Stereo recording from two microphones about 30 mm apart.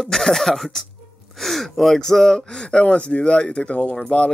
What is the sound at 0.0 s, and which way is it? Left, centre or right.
Speech, centre.